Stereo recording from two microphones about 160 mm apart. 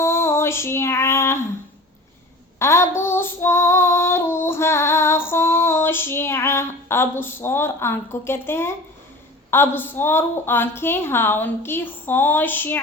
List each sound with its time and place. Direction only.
0.0 s female singing: 15° left (ahead or behind)
2.6 s female singing: 15° left (ahead or behind)
9.5 s a woman's voice: 15° left (ahead or behind)